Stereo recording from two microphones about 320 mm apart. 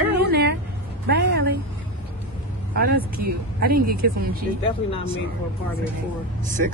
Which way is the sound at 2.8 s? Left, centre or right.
Right.